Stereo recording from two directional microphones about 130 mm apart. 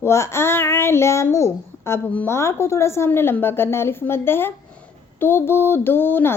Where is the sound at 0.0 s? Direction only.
20° left (ahead or behind).